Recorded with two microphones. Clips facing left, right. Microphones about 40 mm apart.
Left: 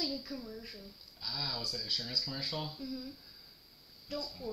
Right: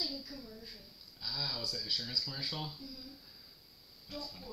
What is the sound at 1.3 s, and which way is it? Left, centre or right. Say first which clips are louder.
Speech: left 1 dB; centre.